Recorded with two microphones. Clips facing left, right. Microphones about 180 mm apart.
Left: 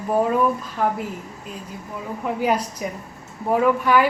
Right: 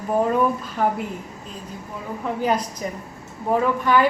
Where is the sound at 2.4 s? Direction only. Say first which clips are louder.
Left 1 dB; 10° left (ahead or behind).